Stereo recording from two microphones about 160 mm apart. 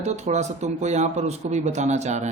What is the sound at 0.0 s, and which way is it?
Speech, 45° right (ahead or behind).